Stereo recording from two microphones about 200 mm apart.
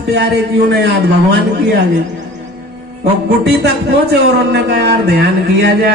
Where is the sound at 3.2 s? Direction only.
55° right (ahead or behind).